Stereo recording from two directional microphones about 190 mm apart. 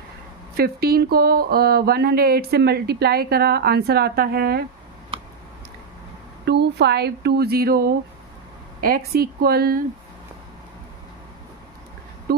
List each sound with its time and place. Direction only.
0.6 s speech: 55° right (ahead or behind)
6.4 s speech: 60° right (ahead or behind)
12.3 s a sound: 55° right (ahead or behind)